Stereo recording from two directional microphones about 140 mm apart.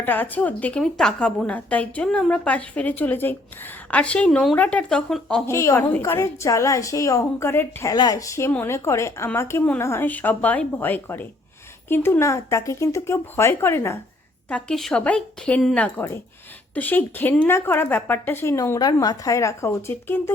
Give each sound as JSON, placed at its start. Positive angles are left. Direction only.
{"t": 0.0, "sound": "a woman's voice", "side_deg": 15}
{"t": 5.5, "sound": "a woman's voice", "side_deg": 20}
{"t": 7.9, "sound": "a woman's voice", "side_deg": 30}
{"t": 14.5, "sound": "a woman's voice", "side_deg": 5}